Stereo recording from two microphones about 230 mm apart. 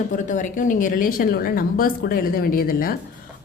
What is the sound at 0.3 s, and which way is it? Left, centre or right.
A woman's voice, left.